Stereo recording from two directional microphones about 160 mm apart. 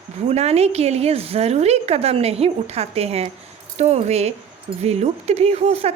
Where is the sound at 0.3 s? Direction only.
40° right (ahead or behind).